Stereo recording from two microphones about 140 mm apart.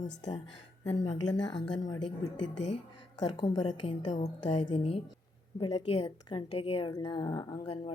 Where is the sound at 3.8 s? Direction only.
50° left (ahead or behind).